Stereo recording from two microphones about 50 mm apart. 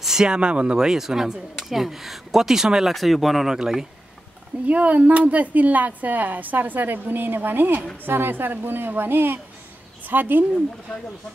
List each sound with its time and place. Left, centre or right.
0.0 s speech: centre
4.6 s a woman's voice: right